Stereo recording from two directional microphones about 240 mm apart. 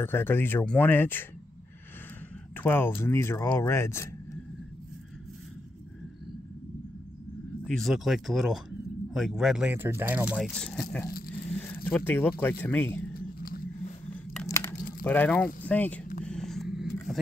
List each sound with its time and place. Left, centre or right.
0.0 s speech: centre
2.5 s speech: centre
7.6 s speech: centre
13.1 s vehicle: left
14.3 s crunch: centre
15.0 s speech: centre
16.3 s a sound: centre